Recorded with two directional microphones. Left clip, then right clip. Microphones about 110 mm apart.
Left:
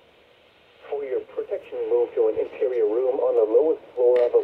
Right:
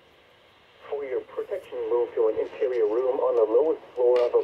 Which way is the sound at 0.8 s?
85° left.